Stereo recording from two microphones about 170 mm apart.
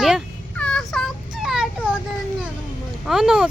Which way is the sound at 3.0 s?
5° right (ahead or behind).